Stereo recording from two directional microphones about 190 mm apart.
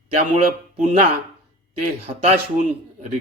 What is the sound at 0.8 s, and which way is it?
Speech, 40° right (ahead or behind).